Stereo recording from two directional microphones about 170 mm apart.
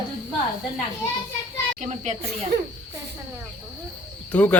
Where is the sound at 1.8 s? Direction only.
40° right (ahead or behind).